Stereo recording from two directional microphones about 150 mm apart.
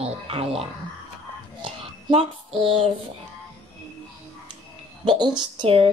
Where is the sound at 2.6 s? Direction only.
35° right (ahead or behind).